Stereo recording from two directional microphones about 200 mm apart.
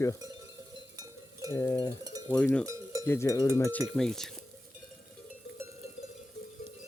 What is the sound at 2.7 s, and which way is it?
Cowbell, 15° right (ahead or behind).